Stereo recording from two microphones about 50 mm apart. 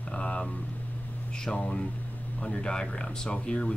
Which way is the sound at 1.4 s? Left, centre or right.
Centre.